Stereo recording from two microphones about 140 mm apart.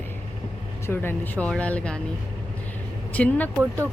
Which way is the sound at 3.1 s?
10° left (ahead or behind).